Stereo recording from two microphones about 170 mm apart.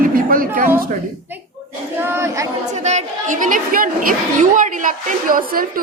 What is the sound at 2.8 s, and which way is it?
A woman's voice, 45° right (ahead or behind).